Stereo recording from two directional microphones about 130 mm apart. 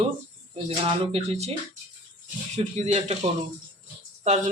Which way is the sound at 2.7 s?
60° right (ahead or behind).